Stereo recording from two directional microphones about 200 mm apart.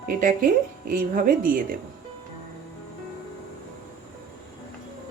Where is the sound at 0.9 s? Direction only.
45° right (ahead or behind).